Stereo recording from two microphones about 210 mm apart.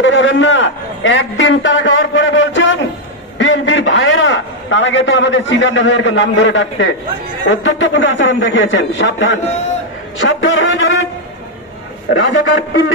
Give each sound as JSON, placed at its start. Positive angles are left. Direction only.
{"t": 0.0, "sound": "a man's voice", "side_deg": 60}
{"t": 12.1, "sound": "speech", "side_deg": 60}